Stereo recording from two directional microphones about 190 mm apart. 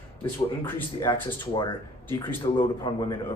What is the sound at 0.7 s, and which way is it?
Speech, 15° left (ahead or behind).